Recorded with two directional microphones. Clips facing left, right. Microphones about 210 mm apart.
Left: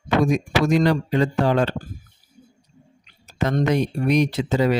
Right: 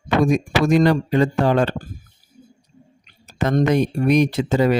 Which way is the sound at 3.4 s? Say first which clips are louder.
Right 3 dB; 50° right (ahead or behind).